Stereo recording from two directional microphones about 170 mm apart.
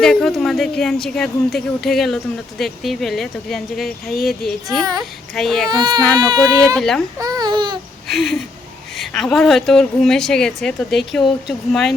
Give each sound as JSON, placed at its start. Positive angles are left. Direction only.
{"t": 0.0, "sound": "a woman's voice", "side_deg": 0}
{"t": 5.7, "sound": "speech", "side_deg": -25}
{"t": 6.7, "sound": "a woman's voice", "side_deg": 0}
{"t": 7.2, "sound": "speech", "side_deg": -20}
{"t": 8.0, "sound": "a woman's voice", "side_deg": 0}